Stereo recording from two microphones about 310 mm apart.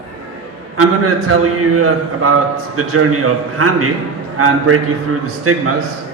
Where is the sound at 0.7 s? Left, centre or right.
Right.